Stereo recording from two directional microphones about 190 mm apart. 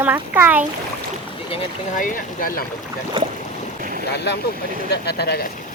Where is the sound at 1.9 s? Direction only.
45° left (ahead or behind).